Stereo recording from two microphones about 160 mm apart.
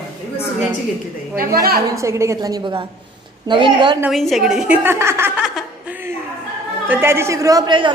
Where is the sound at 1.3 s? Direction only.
70° right (ahead or behind).